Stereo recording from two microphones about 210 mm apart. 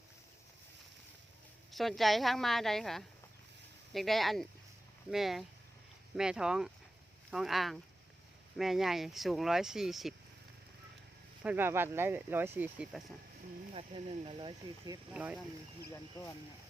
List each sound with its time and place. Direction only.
1.7 s speech: centre (ahead or behind)
11.4 s speech: 10° right (ahead or behind)
13.7 s speech: 25° right (ahead or behind)
15.1 s speech: 5° right (ahead or behind)